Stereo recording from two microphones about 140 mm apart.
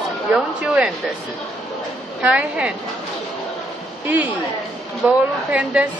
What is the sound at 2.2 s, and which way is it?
Speech, 10° right (ahead or behind).